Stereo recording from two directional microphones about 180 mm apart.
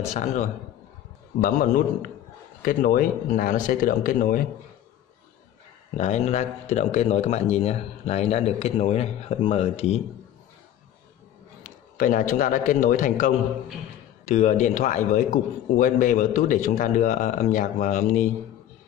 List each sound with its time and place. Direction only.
0.1 s a man's voice: 40° left (ahead or behind)
2.6 s a man's voice: 50° left (ahead or behind)
5.9 s a man's voice: 40° left (ahead or behind)
11.6 s a man's voice: 45° left (ahead or behind)